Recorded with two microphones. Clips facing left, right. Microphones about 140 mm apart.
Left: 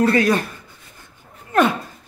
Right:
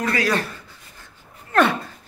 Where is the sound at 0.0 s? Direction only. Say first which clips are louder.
Left 6 dB; 25° left (ahead or behind).